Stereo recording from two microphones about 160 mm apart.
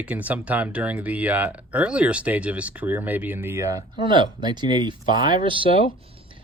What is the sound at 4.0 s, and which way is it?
Speech, 30° right (ahead or behind).